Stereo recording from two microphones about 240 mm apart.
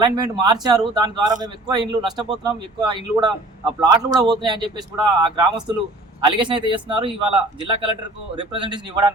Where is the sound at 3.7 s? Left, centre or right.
Centre.